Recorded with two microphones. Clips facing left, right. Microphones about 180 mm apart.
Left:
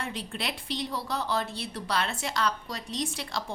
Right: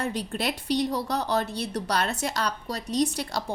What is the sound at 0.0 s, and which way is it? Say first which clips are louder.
A woman's voice: right 6 dB; 40° right (ahead or behind).